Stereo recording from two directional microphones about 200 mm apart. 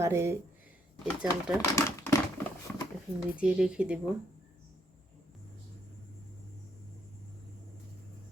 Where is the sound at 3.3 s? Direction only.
5° right (ahead or behind).